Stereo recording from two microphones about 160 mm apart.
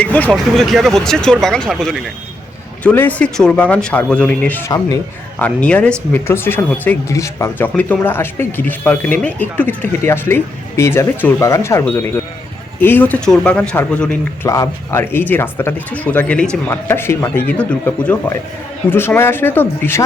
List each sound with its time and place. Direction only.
0.0 s speech: 10° left (ahead or behind)
14.4 s speech: 20° left (ahead or behind)